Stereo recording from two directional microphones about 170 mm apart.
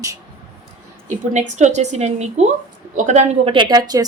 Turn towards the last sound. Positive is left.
turn(degrees=-20)  # may be behind; listen again after turning